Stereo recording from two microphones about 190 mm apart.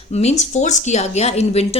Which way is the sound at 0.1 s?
35° left (ahead or behind).